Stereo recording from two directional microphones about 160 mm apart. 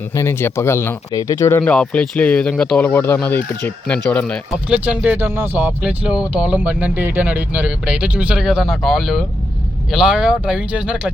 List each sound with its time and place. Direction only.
0.1 s speech: 15° left (ahead or behind)
4.7 s speech: 10° right (ahead or behind)